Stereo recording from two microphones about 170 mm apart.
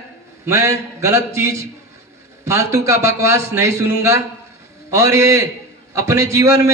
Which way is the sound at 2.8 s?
15° right (ahead or behind).